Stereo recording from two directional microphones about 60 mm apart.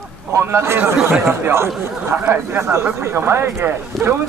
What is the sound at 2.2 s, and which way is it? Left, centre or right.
Speech, right.